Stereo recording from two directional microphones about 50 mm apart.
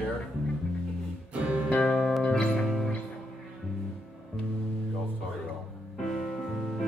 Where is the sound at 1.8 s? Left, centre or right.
Centre.